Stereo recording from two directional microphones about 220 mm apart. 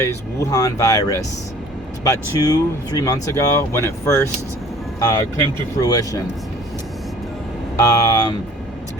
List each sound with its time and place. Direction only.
0.0 s speech: 10° left (ahead or behind)
7.8 s speech: 15° left (ahead or behind)